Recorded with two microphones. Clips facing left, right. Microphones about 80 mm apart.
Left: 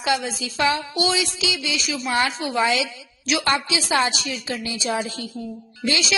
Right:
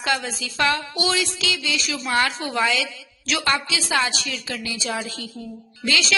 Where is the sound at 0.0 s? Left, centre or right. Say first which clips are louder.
Left 2 dB; centre.